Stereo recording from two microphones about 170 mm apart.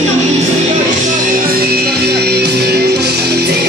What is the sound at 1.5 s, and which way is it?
Music, 65° right (ahead or behind).